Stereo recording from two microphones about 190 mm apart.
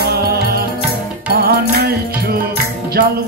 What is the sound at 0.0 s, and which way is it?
Music, 55° right (ahead or behind).